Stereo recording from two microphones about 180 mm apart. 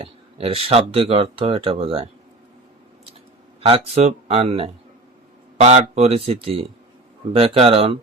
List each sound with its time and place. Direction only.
0.0 s speech: 30° right (ahead or behind)
3.6 s speech: 35° right (ahead or behind)